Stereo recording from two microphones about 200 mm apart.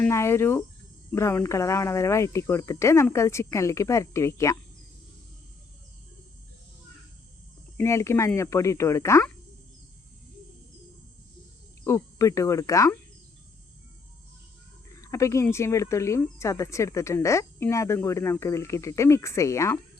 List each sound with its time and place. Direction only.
0.0 s speech: 15° left (ahead or behind)
7.8 s speech: 15° left (ahead or behind)
11.9 s speech: 15° left (ahead or behind)
14.9 s speech: 15° left (ahead or behind)